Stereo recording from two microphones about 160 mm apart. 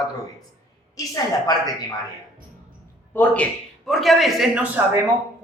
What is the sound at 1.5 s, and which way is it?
Speech, 25° left (ahead or behind).